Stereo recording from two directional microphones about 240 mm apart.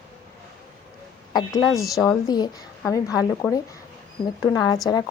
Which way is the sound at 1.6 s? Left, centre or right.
Centre.